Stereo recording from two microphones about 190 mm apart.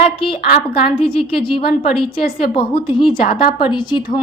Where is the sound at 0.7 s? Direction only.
30° left (ahead or behind).